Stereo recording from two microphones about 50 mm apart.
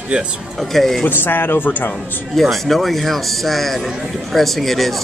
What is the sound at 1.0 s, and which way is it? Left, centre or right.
Speech, left.